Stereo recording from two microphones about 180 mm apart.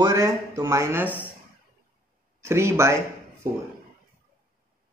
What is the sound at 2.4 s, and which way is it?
Speech, 15° right (ahead or behind).